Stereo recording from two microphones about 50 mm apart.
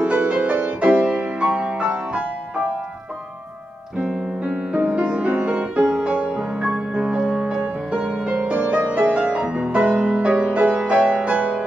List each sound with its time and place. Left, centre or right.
0.0 s music: right
4.0 s piano: centre
4.7 s music: right